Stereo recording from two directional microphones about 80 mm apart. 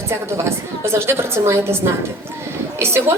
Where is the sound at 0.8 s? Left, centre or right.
Right.